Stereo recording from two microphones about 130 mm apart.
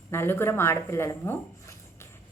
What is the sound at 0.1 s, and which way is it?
A woman's voice, 15° left (ahead or behind).